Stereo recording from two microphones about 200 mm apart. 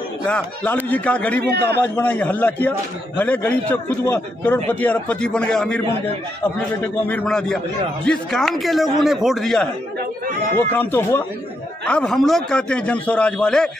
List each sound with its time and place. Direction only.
0.8 s a man's voice: 10° left (ahead or behind)
1.5 s a man's voice: 55° right (ahead or behind)
1.8 s a man's voice: 10° left (ahead or behind)
6.8 s a man's voice: 10° left (ahead or behind)